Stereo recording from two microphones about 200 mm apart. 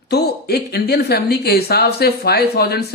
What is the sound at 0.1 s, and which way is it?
Speech, 50° left (ahead or behind).